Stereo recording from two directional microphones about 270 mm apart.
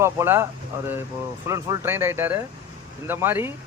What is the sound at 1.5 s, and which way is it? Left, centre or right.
Speech, centre.